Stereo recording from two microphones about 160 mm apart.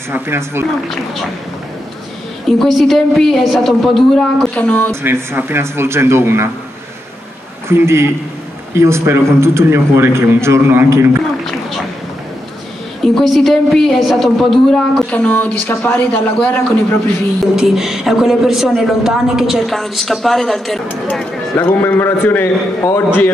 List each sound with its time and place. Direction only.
0.1 s a man's voice: 15° right (ahead or behind)
2.4 s a woman's voice: centre (ahead or behind)
5.0 s a man's voice: 15° right (ahead or behind)
7.6 s a man's voice: 15° right (ahead or behind)
13.0 s a woman's voice: centre (ahead or behind)
17.6 s a woman's voice: centre (ahead or behind); by 23.3 s 15° left (ahead or behind)